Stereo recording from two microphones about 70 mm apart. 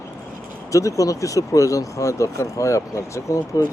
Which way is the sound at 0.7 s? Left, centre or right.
Left.